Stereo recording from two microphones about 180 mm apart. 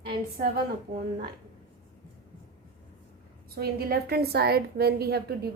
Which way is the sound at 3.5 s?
60° right (ahead or behind).